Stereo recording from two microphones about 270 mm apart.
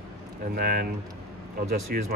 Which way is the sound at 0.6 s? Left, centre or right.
Right.